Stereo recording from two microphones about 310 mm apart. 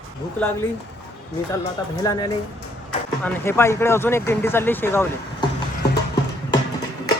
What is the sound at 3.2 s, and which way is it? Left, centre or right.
Speech, centre.